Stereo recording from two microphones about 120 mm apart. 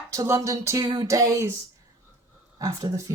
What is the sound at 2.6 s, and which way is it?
Speech, 30° right (ahead or behind).